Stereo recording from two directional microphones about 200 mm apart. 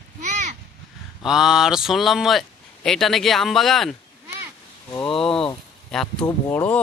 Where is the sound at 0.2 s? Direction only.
35° right (ahead or behind).